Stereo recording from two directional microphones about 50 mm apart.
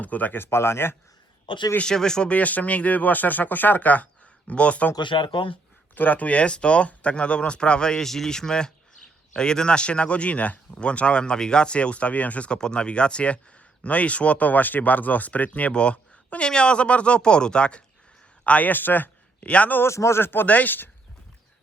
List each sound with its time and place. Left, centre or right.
0.0 s speech: left
0.4 s speech: left
1.8 s speech: centre
2.3 s speech: left
5.9 s speech: left
18.4 s speech: left
19.5 s speech: left
19.8 s speech: left
20.5 s speech: left